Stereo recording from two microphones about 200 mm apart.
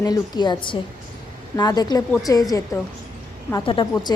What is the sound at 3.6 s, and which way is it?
Speech, 25° left (ahead or behind).